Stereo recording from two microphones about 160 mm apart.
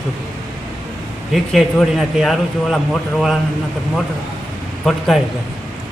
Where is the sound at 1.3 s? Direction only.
Centre (ahead or behind).